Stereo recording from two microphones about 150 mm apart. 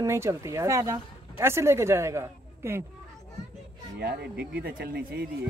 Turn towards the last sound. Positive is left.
turn(degrees=-90)